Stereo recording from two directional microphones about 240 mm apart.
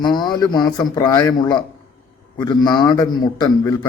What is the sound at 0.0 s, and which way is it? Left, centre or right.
A man's voice, centre.